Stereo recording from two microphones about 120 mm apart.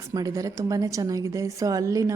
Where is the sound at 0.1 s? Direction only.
30° right (ahead or behind).